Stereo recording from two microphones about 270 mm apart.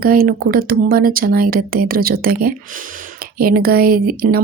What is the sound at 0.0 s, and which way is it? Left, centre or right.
A woman's voice, right.